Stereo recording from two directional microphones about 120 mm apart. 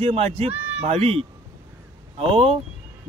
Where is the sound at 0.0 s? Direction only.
55° right (ahead or behind).